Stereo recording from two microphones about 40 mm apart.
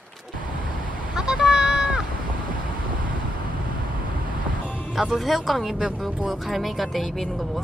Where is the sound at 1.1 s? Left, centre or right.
Centre.